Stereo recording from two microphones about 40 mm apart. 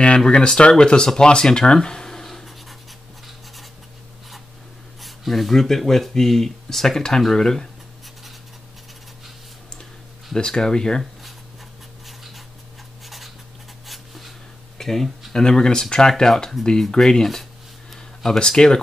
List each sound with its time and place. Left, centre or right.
0.2 s speech: centre
5.0 s speech: centre
10.3 s speech: centre
12.1 s dog: centre
13.0 s writing: centre
13.8 s dog: centre
14.8 s speech: centre
15.4 s speech: centre